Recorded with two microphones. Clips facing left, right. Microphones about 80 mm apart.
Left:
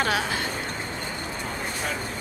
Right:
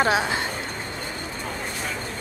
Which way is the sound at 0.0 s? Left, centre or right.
Right.